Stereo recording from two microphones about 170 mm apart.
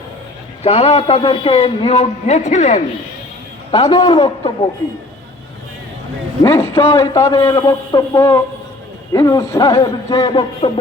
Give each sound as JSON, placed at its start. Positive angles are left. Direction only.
{"t": 0.6, "sound": "a man's voice", "side_deg": 35}
{"t": 3.7, "sound": "a man's voice", "side_deg": 20}
{"t": 6.4, "sound": "a man's voice", "side_deg": 15}